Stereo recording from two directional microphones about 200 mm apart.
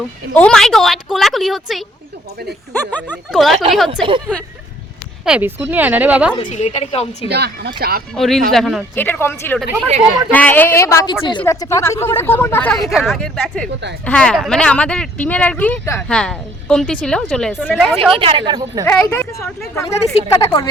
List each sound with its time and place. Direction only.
0.3 s speech: 5° left (ahead or behind)
2.9 s speech: 5° left (ahead or behind)
5.2 s speech: 5° right (ahead or behind)
6.4 s a woman's voice: 35° left (ahead or behind)
7.3 s speech: 55° right (ahead or behind)
8.1 s a woman's voice: centre (ahead or behind)
18.1 s a woman's voice: 25° right (ahead or behind)
18.9 s a woman's voice: 10° left (ahead or behind)